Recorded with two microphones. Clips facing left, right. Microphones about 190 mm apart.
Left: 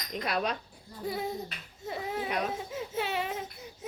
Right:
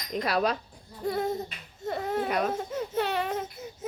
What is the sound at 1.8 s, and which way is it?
Baby cry, centre (ahead or behind).